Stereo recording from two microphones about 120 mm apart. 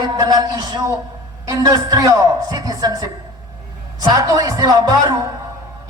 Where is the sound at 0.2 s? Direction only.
35° right (ahead or behind).